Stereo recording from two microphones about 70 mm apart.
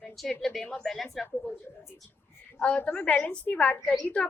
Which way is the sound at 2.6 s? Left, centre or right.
Centre.